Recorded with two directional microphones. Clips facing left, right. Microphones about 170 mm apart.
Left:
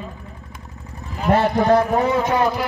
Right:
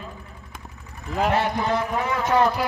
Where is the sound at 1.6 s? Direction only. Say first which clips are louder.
Left 8 dB; 40° left (ahead or behind).